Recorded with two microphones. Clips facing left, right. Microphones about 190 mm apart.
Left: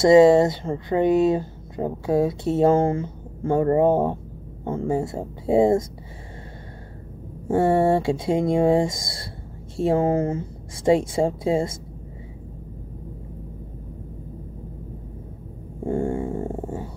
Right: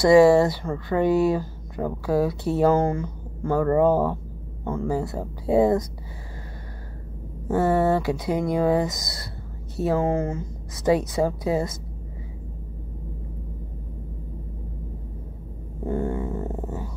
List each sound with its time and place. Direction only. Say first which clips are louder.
0.0 s speech: left 1 dB; 25° left (ahead or behind)
7.4 s speech: left 2 dB; 25° left (ahead or behind)
15.8 s speech: left 2 dB; 30° left (ahead or behind)